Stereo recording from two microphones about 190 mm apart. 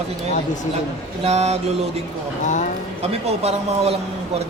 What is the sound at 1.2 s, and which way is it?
Speech, 35° right (ahead or behind).